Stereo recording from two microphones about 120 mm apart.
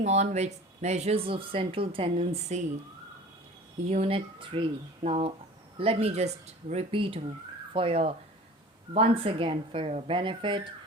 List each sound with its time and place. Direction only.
0.0 s speech: 70° right (ahead or behind)
3.8 s speech: 60° right (ahead or behind)
6.9 s speech: 50° right (ahead or behind)